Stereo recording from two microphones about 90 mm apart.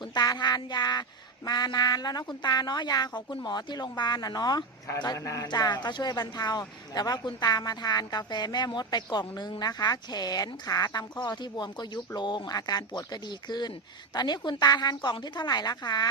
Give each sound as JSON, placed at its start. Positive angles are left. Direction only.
{"t": 0.1, "sound": "a man's voice", "side_deg": 50}
{"t": 5.5, "sound": "speech", "side_deg": 50}